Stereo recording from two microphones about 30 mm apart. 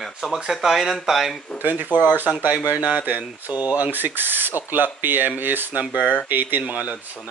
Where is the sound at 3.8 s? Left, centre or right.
Right.